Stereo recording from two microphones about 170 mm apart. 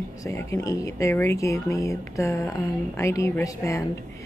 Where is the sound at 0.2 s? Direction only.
15° left (ahead or behind).